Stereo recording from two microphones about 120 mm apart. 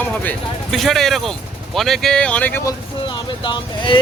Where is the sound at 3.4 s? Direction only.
40° left (ahead or behind).